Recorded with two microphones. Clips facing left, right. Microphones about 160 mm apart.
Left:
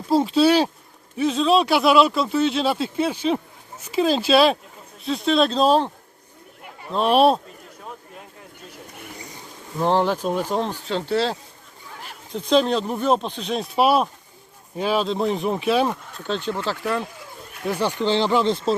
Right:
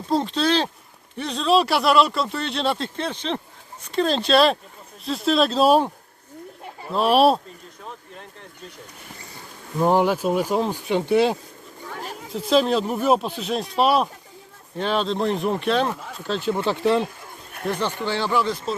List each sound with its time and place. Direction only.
0.1 s speech: 5° left (ahead or behind); by 5.9 s 10° right (ahead or behind)
6.9 s speech: centre (ahead or behind)
9.7 s speech: 10° right (ahead or behind)
12.3 s speech: 5° right (ahead or behind)
16.6 s speech: 25° right (ahead or behind)
17.7 s speech: 10° left (ahead or behind); by 18.7 s 25° left (ahead or behind)